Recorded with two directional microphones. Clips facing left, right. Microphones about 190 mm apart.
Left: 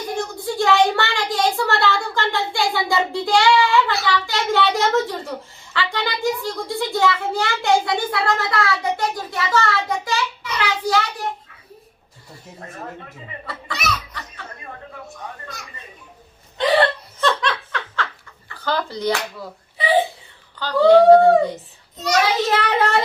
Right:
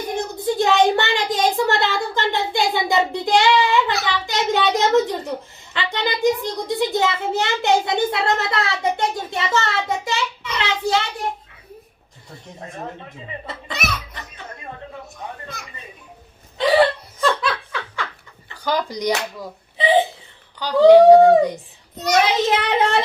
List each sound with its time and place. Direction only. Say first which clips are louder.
0.2 s a child's voice: right 3 dB; 20° right (ahead or behind)
13.5 s speech: left 3 dB; 20° right (ahead or behind)
14.1 s music: left 1 dB; 20° right (ahead or behind)
16.6 s hiccup: right 2 dB; centre (ahead or behind)
17.2 s laughter: even; 5° right (ahead or behind)
18.4 s slap: right 1 dB; 15° right (ahead or behind)
20.6 s a child's voice: right 3 dB; 15° right (ahead or behind)